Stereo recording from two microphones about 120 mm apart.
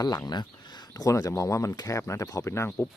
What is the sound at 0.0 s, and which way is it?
Speech, 30° left (ahead or behind).